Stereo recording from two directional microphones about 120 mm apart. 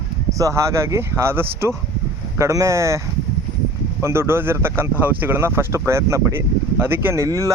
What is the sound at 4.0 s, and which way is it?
Speech, 20° right (ahead or behind).